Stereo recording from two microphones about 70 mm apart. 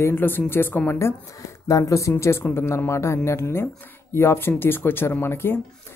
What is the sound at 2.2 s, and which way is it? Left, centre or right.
Speech, left.